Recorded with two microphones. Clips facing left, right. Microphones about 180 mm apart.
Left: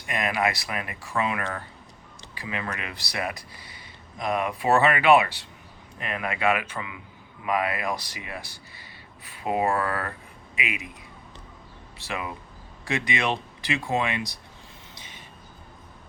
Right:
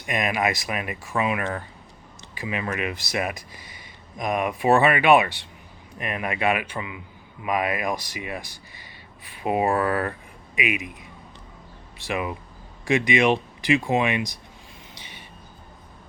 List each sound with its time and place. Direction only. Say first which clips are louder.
0.0 s speech: right 2 dB; 20° right (ahead or behind)
6.4 s speech: even; 20° right (ahead or behind)
11.9 s speech: right 5 dB; 15° right (ahead or behind)